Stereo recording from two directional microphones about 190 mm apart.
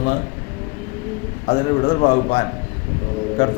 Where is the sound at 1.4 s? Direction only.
45° left (ahead or behind).